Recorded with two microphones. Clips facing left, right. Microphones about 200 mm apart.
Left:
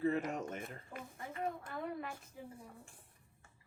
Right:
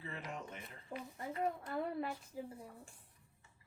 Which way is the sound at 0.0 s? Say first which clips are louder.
Left 11 dB; 45° left (ahead or behind).